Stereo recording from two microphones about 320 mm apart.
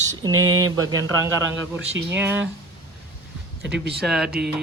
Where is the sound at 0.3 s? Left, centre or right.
Right.